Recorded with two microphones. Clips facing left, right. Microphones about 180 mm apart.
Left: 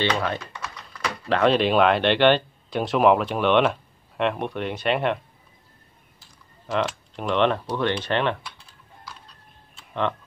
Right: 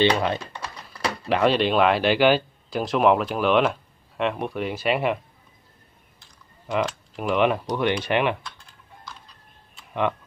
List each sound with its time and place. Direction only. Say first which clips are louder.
0.2 s speech: right 2 dB; 20° right (ahead or behind)
0.6 s typing: right 2 dB; 35° right (ahead or behind)
1.2 s speech: left 1 dB; 5° right (ahead or behind)
6.7 s speech: even; 5° right (ahead or behind)